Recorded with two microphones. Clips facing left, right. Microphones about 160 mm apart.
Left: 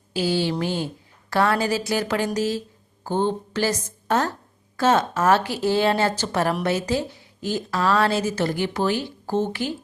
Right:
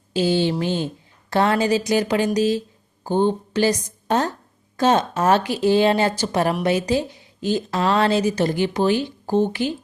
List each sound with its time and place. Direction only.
0.1 s a woman's voice: 20° right (ahead or behind)